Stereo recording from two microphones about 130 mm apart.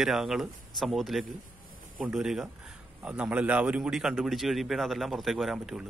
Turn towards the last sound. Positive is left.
turn(degrees=-5)  # may be behind; listen again after turning